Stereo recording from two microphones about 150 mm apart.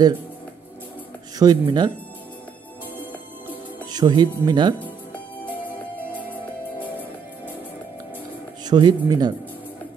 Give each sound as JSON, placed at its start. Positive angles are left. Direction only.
{"t": 1.4, "sound": "speech", "side_deg": -25}
{"t": 3.8, "sound": "speech", "side_deg": -25}
{"t": 4.7, "sound": "music", "side_deg": 10}
{"t": 8.6, "sound": "speech", "side_deg": -30}